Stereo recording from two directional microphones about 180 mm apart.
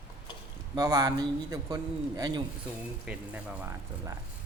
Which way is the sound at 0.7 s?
20° right (ahead or behind).